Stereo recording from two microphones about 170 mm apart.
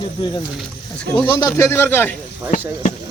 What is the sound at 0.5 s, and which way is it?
Speech, 5° left (ahead or behind).